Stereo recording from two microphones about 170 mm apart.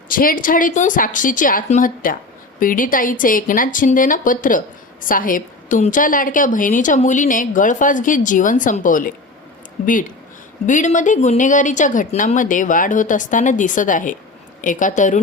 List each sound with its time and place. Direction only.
0.1 s speech: 55° left (ahead or behind)